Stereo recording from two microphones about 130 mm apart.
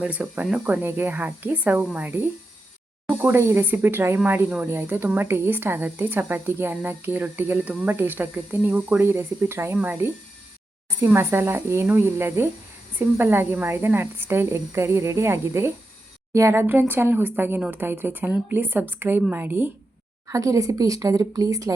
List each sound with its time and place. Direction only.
0.0 s a woman's voice: 10° right (ahead or behind); by 21.7 s 25° right (ahead or behind)